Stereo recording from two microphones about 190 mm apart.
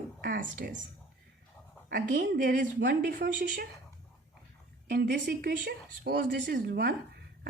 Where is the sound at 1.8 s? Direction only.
50° right (ahead or behind).